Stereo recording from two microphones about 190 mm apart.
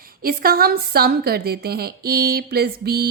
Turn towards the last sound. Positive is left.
turn(degrees=-55)  # may be behind; listen again after turning